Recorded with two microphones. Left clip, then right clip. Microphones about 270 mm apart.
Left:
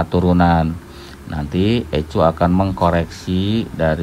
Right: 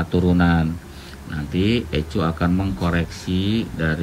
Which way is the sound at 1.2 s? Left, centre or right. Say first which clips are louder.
Left 3 dB; centre.